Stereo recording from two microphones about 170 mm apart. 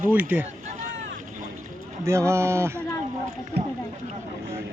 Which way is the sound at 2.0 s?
15° right (ahead or behind).